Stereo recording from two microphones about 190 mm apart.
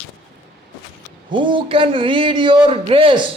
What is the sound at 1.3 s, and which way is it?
A man's voice, 25° right (ahead or behind).